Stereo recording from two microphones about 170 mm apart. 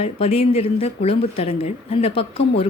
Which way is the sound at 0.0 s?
35° left (ahead or behind).